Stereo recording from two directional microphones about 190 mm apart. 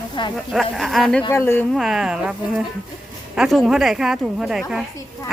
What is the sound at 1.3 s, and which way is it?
Speech, 15° left (ahead or behind).